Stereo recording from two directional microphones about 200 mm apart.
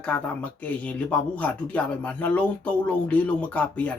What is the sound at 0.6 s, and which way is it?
Speech, 5° left (ahead or behind).